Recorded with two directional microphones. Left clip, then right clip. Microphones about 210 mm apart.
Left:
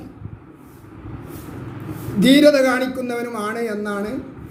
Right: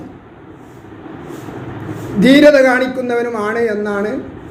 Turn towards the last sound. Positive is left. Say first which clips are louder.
# right 8 dB
turn(degrees=20)  # may be behind; listen again after turning